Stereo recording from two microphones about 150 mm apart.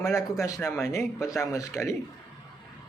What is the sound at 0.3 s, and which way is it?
Speech, 20° left (ahead or behind).